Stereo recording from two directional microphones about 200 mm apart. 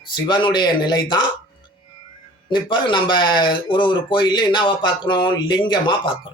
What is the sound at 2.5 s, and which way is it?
Speech, 25° left (ahead or behind).